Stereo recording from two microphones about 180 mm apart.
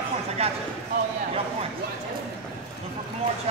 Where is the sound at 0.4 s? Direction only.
35° right (ahead or behind).